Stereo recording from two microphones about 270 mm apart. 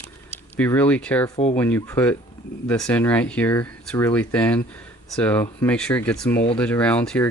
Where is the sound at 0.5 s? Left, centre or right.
Centre.